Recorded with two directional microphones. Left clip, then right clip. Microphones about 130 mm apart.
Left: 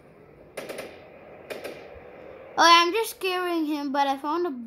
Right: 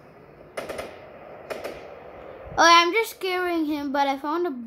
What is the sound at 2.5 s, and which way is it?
A child's voice, 25° left (ahead or behind).